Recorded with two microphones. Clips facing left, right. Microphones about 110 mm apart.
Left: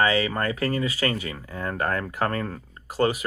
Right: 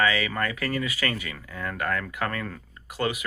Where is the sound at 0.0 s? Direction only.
30° left (ahead or behind).